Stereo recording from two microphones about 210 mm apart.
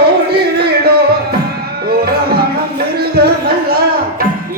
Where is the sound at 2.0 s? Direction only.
50° right (ahead or behind).